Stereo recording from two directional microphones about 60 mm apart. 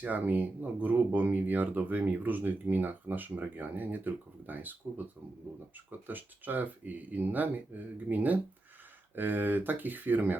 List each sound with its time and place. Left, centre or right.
0.0 s speech: right
6.1 s speech: right